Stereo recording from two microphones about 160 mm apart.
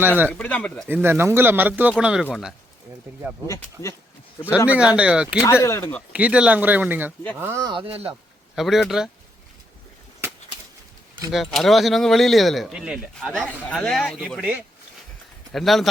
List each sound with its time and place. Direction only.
0.3 s speech: 10° left (ahead or behind)
0.9 s speech: 15° right (ahead or behind)
3.4 s speech: 20° left (ahead or behind)
4.9 s speech: 5° right (ahead or behind)
5.4 s speech: 15° left (ahead or behind)
6.1 s speech: 10° right (ahead or behind)
7.7 s speech: 35° right (ahead or behind)
8.5 s speech: centre (ahead or behind)
11.3 s speech: centre (ahead or behind)